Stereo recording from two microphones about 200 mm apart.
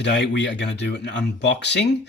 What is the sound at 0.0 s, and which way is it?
Speech, 60° left (ahead or behind).